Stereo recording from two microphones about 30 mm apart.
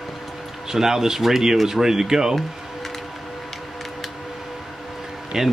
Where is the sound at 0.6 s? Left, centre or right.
Centre.